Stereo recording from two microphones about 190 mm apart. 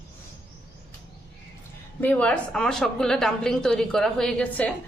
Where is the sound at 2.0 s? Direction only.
10° left (ahead or behind).